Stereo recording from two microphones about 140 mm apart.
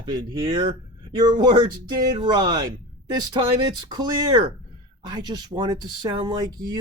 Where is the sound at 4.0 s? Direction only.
30° right (ahead or behind).